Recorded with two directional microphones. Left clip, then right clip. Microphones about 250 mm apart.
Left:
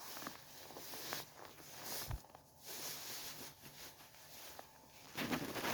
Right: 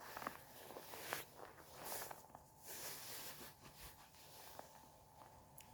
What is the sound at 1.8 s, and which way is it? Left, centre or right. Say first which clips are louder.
Walk: left 2 dB; centre.